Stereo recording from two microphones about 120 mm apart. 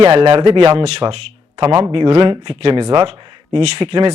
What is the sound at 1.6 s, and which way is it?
Speech, 35° right (ahead or behind).